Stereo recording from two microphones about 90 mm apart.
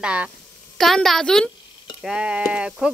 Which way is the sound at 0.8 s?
Centre (ahead or behind).